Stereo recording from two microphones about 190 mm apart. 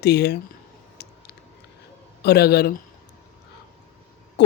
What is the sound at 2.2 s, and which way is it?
Speech, 60° left (ahead or behind).